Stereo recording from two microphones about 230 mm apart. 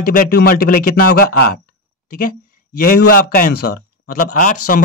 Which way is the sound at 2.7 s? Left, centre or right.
Left.